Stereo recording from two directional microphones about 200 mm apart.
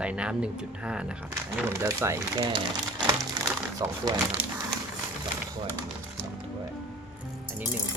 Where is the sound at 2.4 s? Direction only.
25° right (ahead or behind).